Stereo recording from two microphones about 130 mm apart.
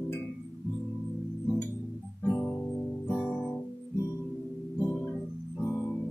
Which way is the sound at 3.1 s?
5° left (ahead or behind).